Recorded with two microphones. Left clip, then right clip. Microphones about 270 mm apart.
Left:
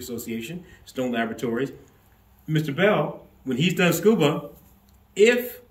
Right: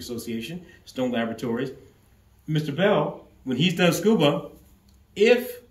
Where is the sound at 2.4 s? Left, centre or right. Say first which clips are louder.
Left 2 dB; centre.